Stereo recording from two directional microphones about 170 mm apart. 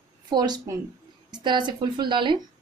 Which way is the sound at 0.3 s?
25° right (ahead or behind).